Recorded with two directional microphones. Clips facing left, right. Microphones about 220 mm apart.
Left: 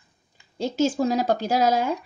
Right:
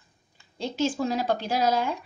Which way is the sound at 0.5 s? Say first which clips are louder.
Left 4 dB; 40° left (ahead or behind).